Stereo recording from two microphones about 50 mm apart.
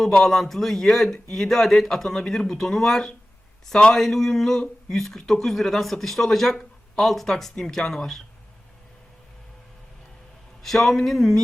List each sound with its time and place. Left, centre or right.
0.1 s speech: centre
10.6 s speech: centre